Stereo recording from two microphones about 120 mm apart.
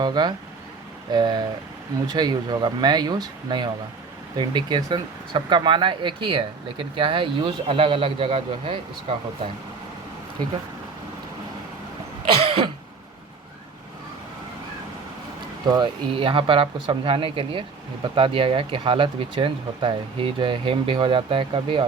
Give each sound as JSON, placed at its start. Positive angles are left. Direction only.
{"t": 0.0, "sound": "speech", "side_deg": -35}
{"t": 12.5, "sound": "throat clearing", "side_deg": -45}
{"t": 15.7, "sound": "speech", "side_deg": -45}